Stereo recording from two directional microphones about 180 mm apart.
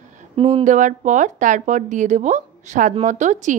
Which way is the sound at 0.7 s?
45° right (ahead or behind).